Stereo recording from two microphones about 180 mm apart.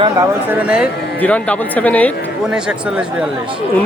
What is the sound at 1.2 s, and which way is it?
Speech, 10° left (ahead or behind).